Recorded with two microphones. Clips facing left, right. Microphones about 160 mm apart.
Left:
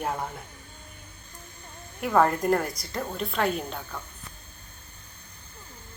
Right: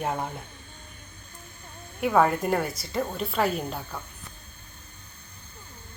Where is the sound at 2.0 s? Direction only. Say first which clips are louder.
Right 1 dB; 5° right (ahead or behind).